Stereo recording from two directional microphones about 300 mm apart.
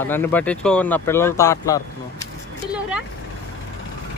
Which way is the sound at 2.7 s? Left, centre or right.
Centre.